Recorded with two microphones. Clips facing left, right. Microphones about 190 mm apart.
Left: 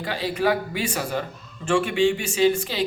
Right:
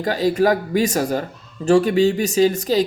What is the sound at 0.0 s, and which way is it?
Speech, 45° right (ahead or behind).